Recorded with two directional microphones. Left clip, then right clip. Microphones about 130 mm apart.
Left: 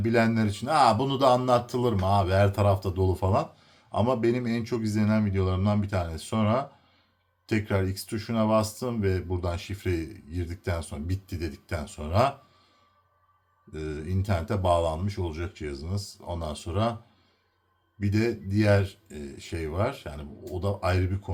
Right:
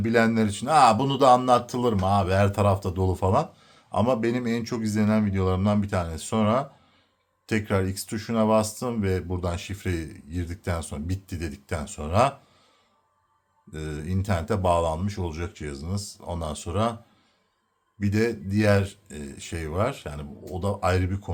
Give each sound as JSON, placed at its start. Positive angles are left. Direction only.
{"t": 0.0, "sound": "a man's voice", "side_deg": -40}
{"t": 13.7, "sound": "a man's voice", "side_deg": -45}
{"t": 18.0, "sound": "a man's voice", "side_deg": -45}